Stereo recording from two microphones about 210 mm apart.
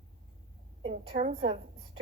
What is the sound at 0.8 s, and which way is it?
Speech, 35° right (ahead or behind).